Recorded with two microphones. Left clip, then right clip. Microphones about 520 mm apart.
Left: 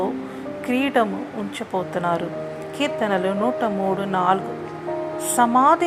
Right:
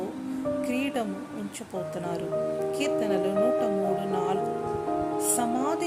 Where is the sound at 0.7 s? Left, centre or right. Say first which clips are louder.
Left 9 dB; right.